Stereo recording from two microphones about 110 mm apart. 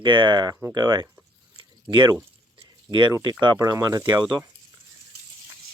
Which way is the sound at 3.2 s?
45° right (ahead or behind).